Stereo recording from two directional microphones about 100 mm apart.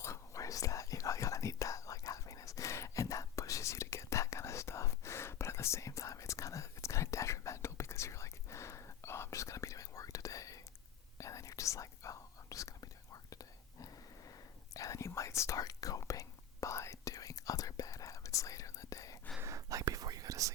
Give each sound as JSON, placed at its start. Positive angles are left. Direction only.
{"t": 0.0, "sound": "whispering", "side_deg": 30}
{"t": 19.4, "sound": "whispering", "side_deg": -30}